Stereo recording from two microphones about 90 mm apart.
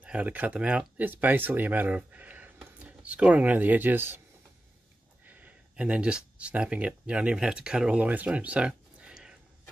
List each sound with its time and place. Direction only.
0.0 s speech: 15° right (ahead or behind)
5.2 s speech: 15° right (ahead or behind)